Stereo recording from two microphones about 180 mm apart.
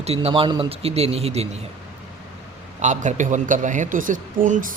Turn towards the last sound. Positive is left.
turn(degrees=-50)  # may be behind; listen again after turning